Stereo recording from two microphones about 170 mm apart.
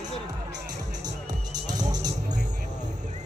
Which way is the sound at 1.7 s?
25° right (ahead or behind).